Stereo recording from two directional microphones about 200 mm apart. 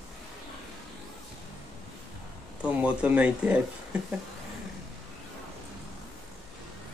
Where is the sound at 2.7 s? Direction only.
5° right (ahead or behind).